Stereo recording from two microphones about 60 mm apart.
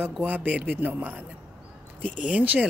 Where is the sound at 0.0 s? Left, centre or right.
Right.